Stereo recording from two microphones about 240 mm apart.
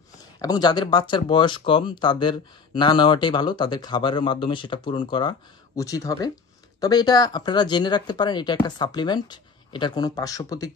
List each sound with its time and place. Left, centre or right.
0.4 s speech: centre